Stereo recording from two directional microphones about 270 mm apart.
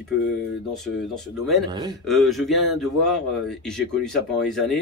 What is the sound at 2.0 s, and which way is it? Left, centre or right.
Speech, centre.